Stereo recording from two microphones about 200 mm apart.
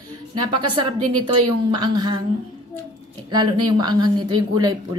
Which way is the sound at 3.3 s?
20° right (ahead or behind).